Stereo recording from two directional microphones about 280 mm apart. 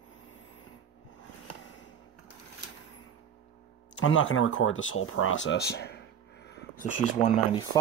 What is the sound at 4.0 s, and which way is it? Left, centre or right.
Speech, left.